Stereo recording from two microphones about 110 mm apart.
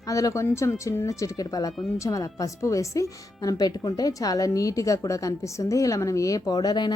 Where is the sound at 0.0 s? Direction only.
30° left (ahead or behind).